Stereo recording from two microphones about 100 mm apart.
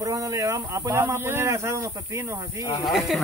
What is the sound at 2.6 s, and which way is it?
Speech, 45° left (ahead or behind).